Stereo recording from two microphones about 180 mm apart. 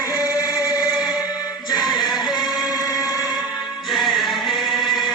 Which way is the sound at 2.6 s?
20° left (ahead or behind).